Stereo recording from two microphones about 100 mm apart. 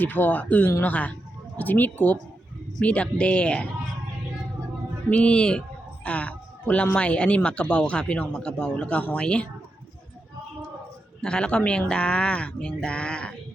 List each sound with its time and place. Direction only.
0.0 s speech: 20° left (ahead or behind)
5.0 s speech: 10° left (ahead or behind)
11.2 s speech: 10° left (ahead or behind)